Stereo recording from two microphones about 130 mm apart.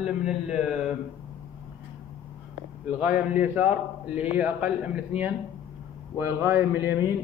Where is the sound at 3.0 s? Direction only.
10° right (ahead or behind).